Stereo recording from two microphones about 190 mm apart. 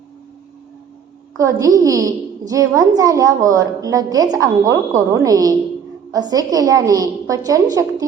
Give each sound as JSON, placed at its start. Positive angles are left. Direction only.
{"t": 1.4, "sound": "a woman's voice", "side_deg": -15}